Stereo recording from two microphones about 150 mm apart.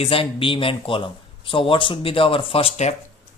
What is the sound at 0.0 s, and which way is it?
A man's voice, 35° left (ahead or behind).